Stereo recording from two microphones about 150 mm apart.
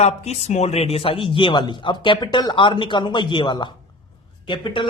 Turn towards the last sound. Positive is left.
turn(degrees=35)  # may be behind; listen again after turning